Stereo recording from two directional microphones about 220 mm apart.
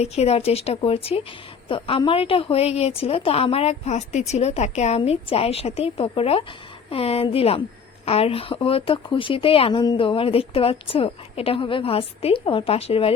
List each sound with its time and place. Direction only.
0.0 s a woman's voice: 30° left (ahead or behind)